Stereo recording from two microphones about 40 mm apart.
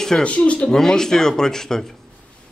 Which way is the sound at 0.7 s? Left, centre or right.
Centre.